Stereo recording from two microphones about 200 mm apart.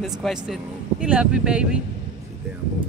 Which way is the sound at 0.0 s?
Centre (ahead or behind).